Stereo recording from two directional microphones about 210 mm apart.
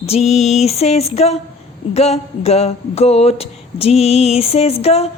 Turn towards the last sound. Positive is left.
turn(degrees=30)  # may be behind; listen again after turning